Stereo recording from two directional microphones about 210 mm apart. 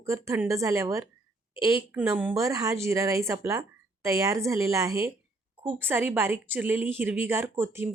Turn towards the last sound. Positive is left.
turn(degrees=-10)  # may be behind; listen again after turning